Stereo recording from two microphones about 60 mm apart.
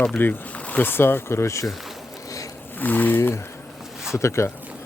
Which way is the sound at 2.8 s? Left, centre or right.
Left.